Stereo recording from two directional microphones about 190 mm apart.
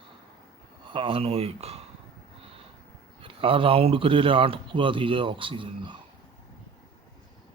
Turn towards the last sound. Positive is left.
turn(degrees=-25)  # may be behind; listen again after turning